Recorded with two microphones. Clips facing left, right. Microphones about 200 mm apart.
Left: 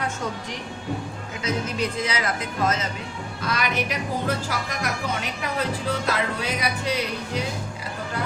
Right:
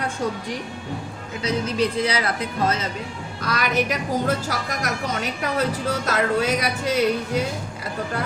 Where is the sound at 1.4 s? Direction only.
35° right (ahead or behind).